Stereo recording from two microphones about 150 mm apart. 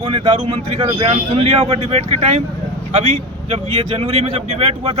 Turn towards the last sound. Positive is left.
turn(degrees=-40)  # may be behind; listen again after turning